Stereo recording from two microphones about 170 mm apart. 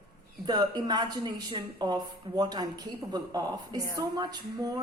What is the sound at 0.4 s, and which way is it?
A woman's voice, 25° right (ahead or behind).